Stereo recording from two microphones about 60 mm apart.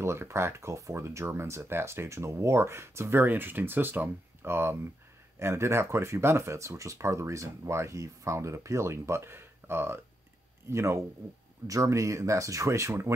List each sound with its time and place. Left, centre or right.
0.0 s speech: right
3.3 s speech: right
11.6 s speech: right